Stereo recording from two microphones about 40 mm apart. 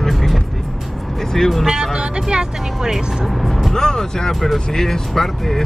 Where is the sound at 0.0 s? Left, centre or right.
Centre.